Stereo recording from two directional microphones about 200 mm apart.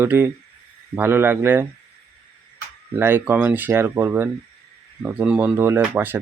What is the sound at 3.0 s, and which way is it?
Speech, 10° right (ahead or behind).